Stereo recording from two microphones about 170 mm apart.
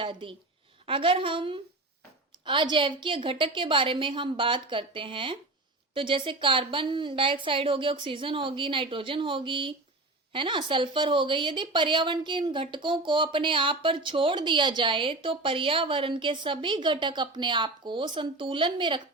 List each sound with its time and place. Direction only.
0.0 s a woman's voice: 30° right (ahead or behind)